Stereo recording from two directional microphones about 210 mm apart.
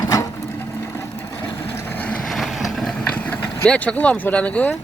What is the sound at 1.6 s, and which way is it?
Vehicle, 10° left (ahead or behind).